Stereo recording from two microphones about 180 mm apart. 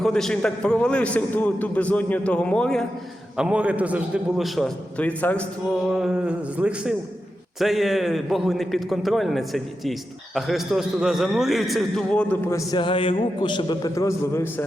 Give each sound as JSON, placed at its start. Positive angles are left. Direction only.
{"t": 0.0, "sound": "a man's voice", "side_deg": 0}
{"t": 5.9, "sound": "a man's voice", "side_deg": -5}
{"t": 12.7, "sound": "a man's voice", "side_deg": 30}